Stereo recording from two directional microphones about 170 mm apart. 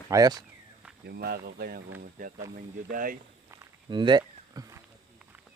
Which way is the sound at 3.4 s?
15° right (ahead or behind).